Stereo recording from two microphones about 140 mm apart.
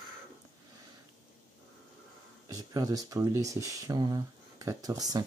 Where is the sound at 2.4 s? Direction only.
25° right (ahead or behind).